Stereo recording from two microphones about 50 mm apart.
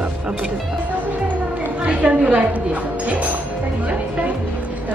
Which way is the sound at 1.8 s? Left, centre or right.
Right.